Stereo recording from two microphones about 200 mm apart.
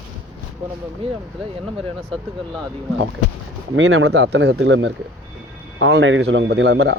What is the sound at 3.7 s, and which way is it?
A man's voice, 85° right.